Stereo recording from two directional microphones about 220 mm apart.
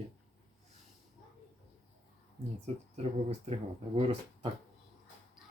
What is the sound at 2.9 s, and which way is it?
Speech, 30° right (ahead or behind).